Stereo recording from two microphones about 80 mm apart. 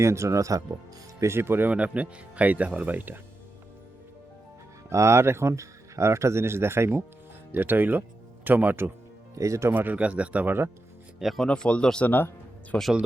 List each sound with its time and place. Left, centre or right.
0.0 s speech: right
1.2 s speech: right
1.7 s speech: centre
4.9 s speech: right
9.3 s speech: right
9.6 s speech: right
11.2 s speech: centre
11.4 s speech: centre
12.0 s speech: left